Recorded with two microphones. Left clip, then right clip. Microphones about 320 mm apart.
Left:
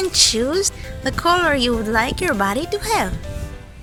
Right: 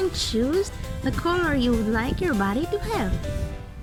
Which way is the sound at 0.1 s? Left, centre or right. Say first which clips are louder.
Left 8 dB; centre.